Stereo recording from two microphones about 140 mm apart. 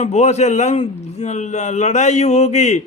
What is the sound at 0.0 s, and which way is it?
A man's voice, 50° left (ahead or behind).